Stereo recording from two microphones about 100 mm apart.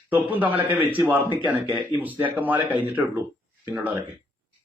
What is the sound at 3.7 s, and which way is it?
Speech, 15° right (ahead or behind).